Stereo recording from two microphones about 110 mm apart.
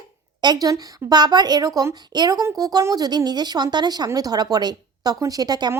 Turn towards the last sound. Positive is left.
turn(degrees=-35)  # may be behind; listen again after turning